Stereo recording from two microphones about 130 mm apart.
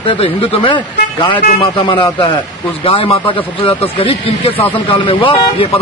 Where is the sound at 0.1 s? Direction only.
45° left (ahead or behind).